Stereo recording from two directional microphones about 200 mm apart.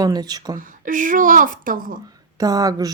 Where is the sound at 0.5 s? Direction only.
40° right (ahead or behind).